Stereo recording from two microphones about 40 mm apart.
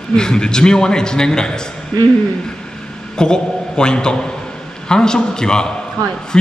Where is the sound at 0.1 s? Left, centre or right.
Centre.